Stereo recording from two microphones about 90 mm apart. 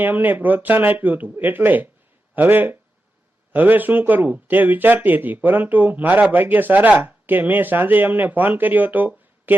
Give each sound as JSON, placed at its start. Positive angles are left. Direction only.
{"t": 0.0, "sound": "speech", "side_deg": -20}